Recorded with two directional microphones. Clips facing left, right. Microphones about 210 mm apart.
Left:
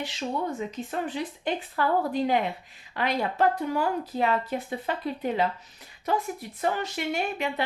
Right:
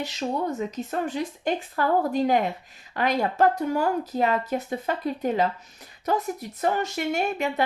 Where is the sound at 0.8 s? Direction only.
45° right (ahead or behind).